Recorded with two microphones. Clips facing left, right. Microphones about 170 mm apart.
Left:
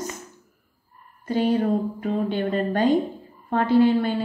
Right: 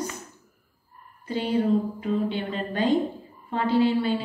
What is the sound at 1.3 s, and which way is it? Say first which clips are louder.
A woman's voice: left 2 dB; 45° left (ahead or behind).